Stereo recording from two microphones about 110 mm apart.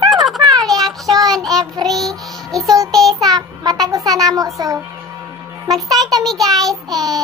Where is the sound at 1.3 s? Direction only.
Centre (ahead or behind).